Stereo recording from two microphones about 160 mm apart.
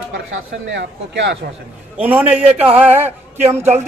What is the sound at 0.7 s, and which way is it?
Speech, 90° right.